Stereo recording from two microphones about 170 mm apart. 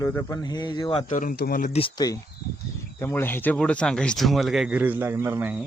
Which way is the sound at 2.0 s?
25° left (ahead or behind).